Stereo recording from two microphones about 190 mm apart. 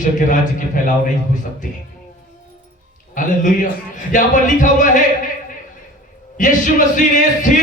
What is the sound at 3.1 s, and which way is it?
Speech, 45° left (ahead or behind).